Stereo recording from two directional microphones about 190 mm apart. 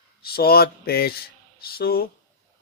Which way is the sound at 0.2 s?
55° left (ahead or behind).